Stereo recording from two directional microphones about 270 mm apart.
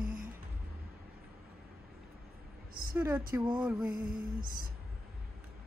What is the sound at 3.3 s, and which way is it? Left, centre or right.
Speech, centre.